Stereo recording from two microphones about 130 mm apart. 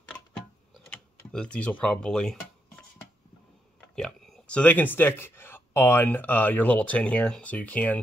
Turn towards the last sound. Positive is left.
turn(degrees=10)  # may be behind; listen again after turning